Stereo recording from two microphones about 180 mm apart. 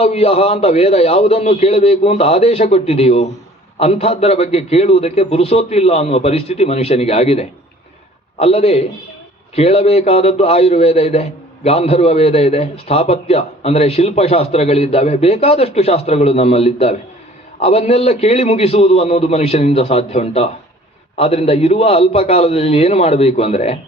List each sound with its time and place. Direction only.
0.0 s a man's voice: 35° left (ahead or behind)